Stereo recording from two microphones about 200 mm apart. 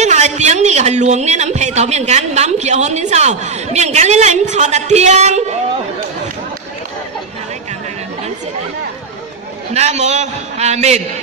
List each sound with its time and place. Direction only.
0.0 s a man's voice: 35° right (ahead or behind)
9.8 s a man's voice: 35° right (ahead or behind)